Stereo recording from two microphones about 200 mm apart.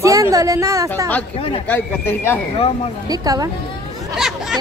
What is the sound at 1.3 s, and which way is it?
Speech, 25° left (ahead or behind).